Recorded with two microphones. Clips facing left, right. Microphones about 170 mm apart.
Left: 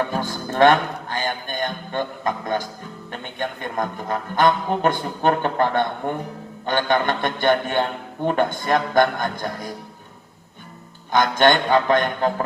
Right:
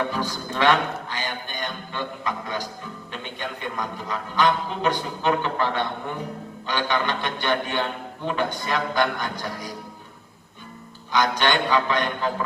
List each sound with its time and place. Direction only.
0.1 s music: 50° left (ahead or behind)
3.1 s a man's voice: 50° left (ahead or behind)
11.1 s a man's voice: 50° left (ahead or behind)